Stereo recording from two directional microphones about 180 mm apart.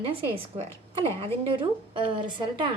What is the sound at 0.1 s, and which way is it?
A woman's voice, 30° right (ahead or behind).